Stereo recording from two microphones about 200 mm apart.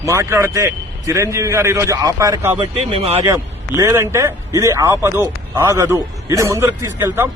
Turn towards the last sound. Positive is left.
turn(degrees=-10)  # may be behind; listen again after turning